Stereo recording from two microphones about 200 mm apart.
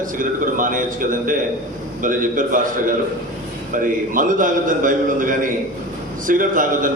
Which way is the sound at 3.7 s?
40° right (ahead or behind).